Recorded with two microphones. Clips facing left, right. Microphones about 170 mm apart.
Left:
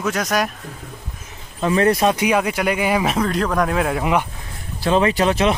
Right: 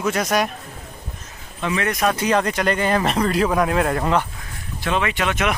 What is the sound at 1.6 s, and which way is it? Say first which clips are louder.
Speech: left 6 dB; 35° left (ahead or behind).